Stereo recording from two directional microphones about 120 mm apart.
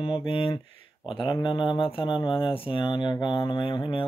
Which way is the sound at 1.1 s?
45° left (ahead or behind).